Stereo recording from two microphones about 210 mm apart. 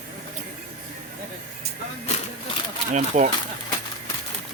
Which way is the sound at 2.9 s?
35° right (ahead or behind).